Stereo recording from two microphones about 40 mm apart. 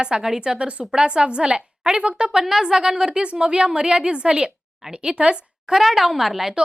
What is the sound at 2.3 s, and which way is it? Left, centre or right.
A woman's voice, centre.